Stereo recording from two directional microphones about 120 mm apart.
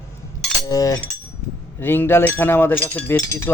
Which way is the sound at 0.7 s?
30° left (ahead or behind).